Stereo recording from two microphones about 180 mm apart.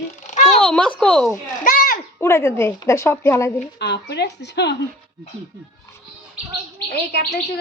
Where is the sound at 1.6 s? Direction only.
50° left (ahead or behind).